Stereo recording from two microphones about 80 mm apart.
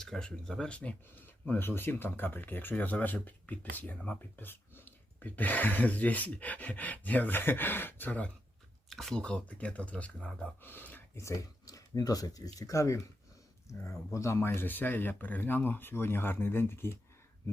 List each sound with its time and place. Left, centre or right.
0.0 s speech: centre
8.9 s speech: centre
9.2 s speech: centre
10.6 s speech: left
11.2 s speech: left